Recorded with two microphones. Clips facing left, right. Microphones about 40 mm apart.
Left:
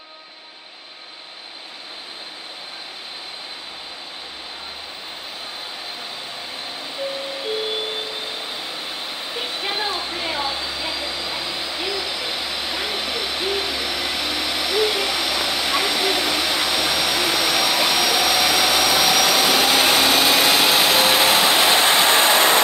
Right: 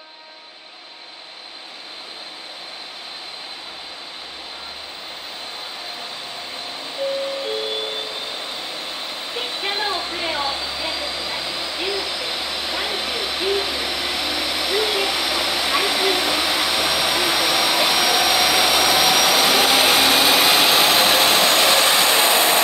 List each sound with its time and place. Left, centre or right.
6.5 s music: centre
22.0 s vehicle: left